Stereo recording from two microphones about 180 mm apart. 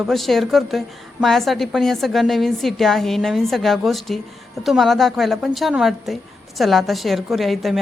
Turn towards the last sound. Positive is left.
turn(degrees=0)  # may be behind; listen again after turning